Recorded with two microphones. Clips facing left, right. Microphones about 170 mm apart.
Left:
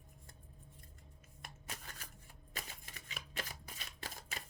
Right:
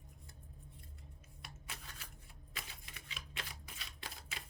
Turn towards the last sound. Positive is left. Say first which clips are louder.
# left 2 dB
turn(degrees=45)  # may be behind; listen again after turning